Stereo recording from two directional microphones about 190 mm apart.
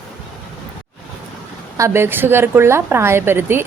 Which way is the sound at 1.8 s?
15° right (ahead or behind).